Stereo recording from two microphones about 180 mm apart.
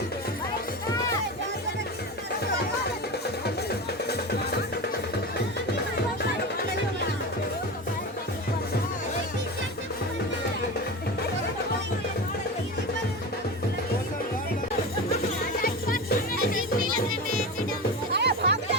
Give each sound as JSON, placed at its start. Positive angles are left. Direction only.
{"t": 15.6, "sound": "music", "side_deg": 55}
{"t": 16.6, "sound": "music", "side_deg": -50}